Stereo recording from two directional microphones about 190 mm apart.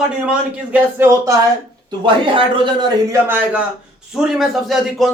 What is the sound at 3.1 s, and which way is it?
Speech, 10° right (ahead or behind).